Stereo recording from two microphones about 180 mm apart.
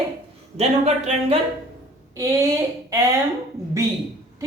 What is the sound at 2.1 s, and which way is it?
Speech, 15° right (ahead or behind).